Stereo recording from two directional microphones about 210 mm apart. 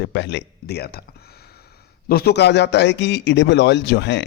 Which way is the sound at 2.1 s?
50° left (ahead or behind).